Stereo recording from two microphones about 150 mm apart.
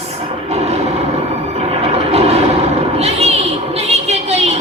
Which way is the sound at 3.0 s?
45° right (ahead or behind).